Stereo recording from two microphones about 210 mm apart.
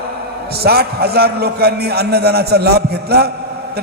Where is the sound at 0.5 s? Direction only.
50° right (ahead or behind).